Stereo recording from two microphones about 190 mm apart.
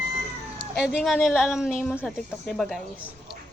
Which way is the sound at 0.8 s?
Centre (ahead or behind).